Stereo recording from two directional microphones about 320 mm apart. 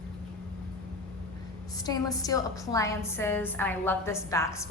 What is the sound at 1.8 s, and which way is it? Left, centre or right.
A woman's voice, centre.